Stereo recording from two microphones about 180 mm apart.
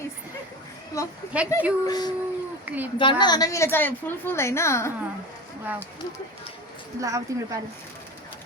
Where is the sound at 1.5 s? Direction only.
15° left (ahead or behind).